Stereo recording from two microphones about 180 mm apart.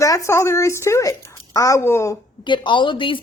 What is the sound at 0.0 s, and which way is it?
A woman's voice, 15° left (ahead or behind).